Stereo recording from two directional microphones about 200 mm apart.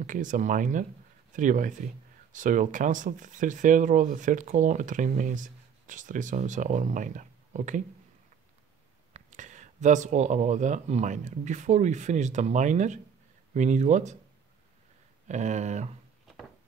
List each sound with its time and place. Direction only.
0.0 s speech: 40° right (ahead or behind)
9.1 s speech: 40° right (ahead or behind)
15.2 s speech: 35° right (ahead or behind)